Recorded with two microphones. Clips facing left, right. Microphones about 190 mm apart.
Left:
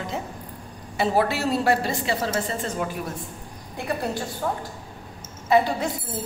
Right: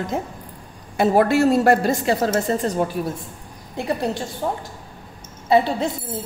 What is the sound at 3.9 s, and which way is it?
A woman's voice, 25° right (ahead or behind).